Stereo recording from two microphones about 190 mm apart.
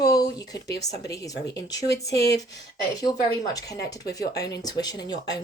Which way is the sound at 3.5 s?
20° left (ahead or behind).